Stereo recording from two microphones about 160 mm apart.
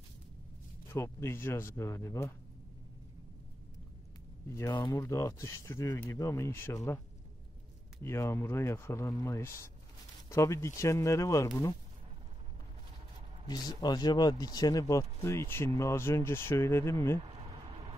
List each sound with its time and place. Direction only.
0.8 s speech: 15° left (ahead or behind)
4.5 s speech: 20° left (ahead or behind)
4.7 s speech: 30° left (ahead or behind)
5.0 s speech: 20° left (ahead or behind)
8.0 s speech: 15° left (ahead or behind)
13.5 s speech: 25° left (ahead or behind)
17.5 s a sound: 35° right (ahead or behind)